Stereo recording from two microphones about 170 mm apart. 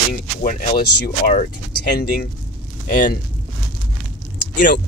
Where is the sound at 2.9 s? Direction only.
50° left (ahead or behind).